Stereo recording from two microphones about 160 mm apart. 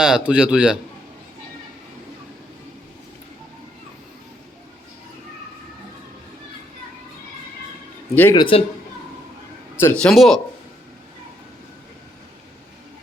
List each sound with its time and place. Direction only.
0.0 s a man's voice: 5° right (ahead or behind)
8.1 s speech: 10° left (ahead or behind)
8.4 s a man's voice: 35° left (ahead or behind)
9.8 s a man's voice: 5° left (ahead or behind)